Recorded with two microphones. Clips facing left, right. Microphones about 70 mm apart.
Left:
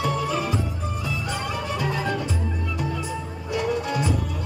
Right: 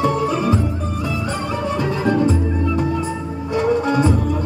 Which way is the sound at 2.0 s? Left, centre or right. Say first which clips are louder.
Right 10 dB; right.